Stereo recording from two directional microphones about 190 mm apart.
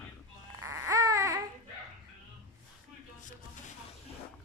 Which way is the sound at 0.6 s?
15° right (ahead or behind).